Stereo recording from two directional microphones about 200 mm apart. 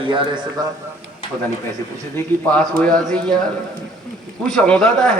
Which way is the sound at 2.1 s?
5° left (ahead or behind).